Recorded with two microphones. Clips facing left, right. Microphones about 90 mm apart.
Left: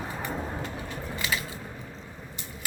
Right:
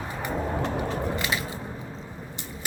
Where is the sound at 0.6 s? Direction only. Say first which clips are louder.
Right 8 dB; 90° right.